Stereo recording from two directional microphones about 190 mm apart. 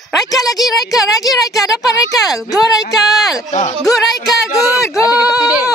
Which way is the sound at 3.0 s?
Centre (ahead or behind).